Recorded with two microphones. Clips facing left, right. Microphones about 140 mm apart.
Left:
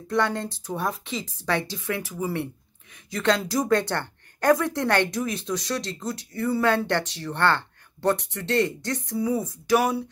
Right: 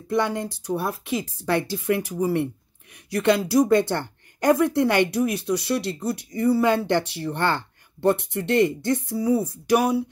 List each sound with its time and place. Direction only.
0.1 s speech: 15° right (ahead or behind)